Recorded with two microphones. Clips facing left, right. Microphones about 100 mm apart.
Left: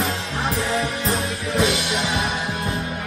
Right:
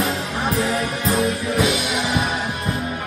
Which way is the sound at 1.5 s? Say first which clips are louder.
Left 2 dB; centre (ahead or behind).